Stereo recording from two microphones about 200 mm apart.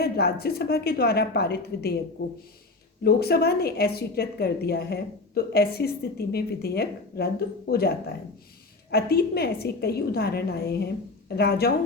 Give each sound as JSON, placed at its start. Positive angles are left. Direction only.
{"t": 0.0, "sound": "a woman's voice", "side_deg": 50}
{"t": 3.0, "sound": "a woman's voice", "side_deg": 50}